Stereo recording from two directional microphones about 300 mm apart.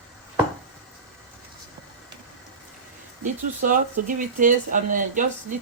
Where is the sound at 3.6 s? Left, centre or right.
Right.